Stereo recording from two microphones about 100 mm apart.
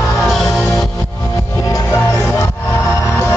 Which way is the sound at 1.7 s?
30° left (ahead or behind).